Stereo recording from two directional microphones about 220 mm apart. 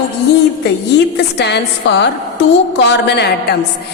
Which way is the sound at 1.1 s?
50° left (ahead or behind).